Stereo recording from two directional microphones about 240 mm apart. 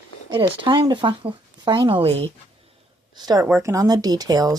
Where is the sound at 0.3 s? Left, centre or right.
Centre.